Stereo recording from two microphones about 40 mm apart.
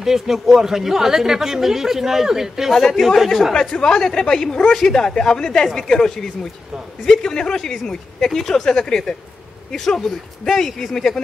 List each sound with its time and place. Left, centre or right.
0.0 s speech: centre
2.7 s speech: centre